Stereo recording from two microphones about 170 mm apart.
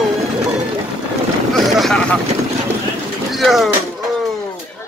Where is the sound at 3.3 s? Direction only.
Centre (ahead or behind).